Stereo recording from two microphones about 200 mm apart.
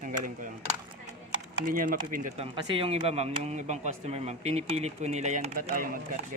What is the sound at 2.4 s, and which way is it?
Speech, 25° right (ahead or behind).